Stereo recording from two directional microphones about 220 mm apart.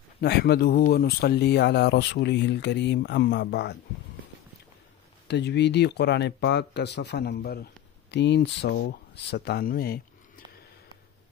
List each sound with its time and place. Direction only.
0.2 s speech: 50° left (ahead or behind)
5.3 s speech: 50° left (ahead or behind)